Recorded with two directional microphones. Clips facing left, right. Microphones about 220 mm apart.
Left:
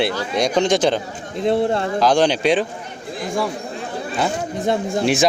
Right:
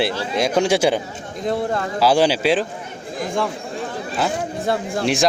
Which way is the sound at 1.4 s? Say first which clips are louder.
Left 4 dB; 25° left (ahead or behind).